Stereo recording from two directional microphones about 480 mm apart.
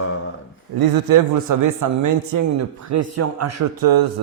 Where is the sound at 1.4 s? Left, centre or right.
Right.